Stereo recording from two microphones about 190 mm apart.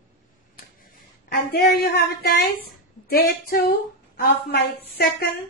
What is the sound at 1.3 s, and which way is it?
A woman's voice, 55° left (ahead or behind).